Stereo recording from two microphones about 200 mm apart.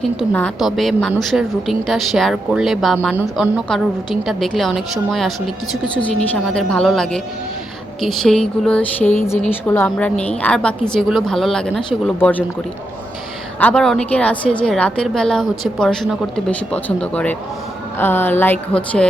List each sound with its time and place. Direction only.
0.0 s a woman's voice: 5° left (ahead or behind)
6.3 s a woman's voice: 5° left (ahead or behind)
13.6 s a woman's voice: 5° left (ahead or behind)